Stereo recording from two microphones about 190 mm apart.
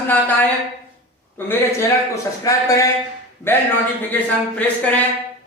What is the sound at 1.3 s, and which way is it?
A man's voice, 10° left (ahead or behind).